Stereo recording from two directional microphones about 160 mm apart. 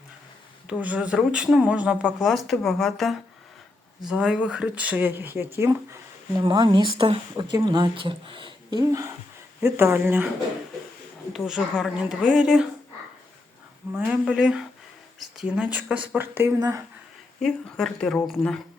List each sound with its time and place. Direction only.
0.7 s speech: 10° right (ahead or behind)
6.3 s speech: 30° right (ahead or behind); by 10.2 s 10° right (ahead or behind)
11.3 s speech: centre (ahead or behind)
14.0 s speech: centre (ahead or behind); by 16.8 s 20° right (ahead or behind)
17.4 s speech: 5° left (ahead or behind)